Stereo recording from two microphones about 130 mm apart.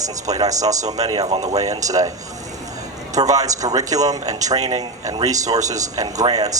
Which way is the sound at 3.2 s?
25° right (ahead or behind).